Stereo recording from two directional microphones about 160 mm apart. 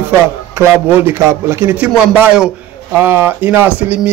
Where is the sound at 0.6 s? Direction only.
15° right (ahead or behind).